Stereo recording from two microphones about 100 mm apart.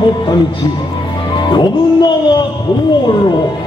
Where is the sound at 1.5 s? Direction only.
45° left (ahead or behind).